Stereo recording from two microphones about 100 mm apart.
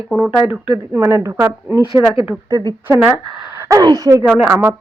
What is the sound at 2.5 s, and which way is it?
Speech, 35° right (ahead or behind).